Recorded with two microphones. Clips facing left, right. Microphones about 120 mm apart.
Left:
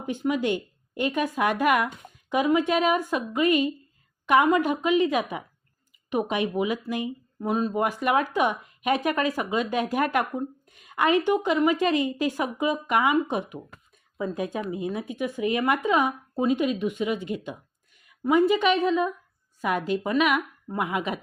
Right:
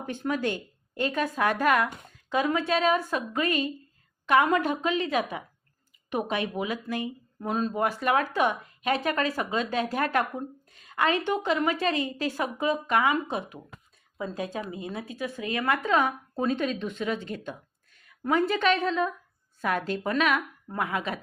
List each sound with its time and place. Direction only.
0.0 s speech: 15° left (ahead or behind)